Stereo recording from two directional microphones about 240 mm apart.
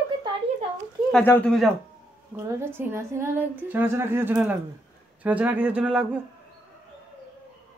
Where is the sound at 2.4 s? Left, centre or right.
Centre.